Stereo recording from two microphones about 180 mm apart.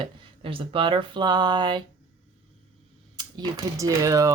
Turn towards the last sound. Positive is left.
turn(degrees=-15)  # may be behind; listen again after turning